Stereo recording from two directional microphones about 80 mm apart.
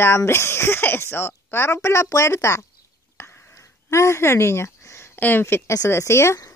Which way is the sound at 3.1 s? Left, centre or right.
Left.